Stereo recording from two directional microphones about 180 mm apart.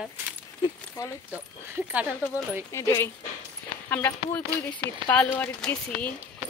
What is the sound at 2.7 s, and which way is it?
Speech, 15° left (ahead or behind).